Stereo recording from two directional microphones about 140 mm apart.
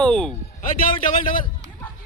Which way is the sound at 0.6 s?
65° left (ahead or behind).